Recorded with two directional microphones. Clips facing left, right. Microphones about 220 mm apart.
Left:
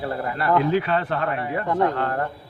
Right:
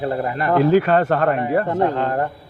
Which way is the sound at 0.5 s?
45° right (ahead or behind).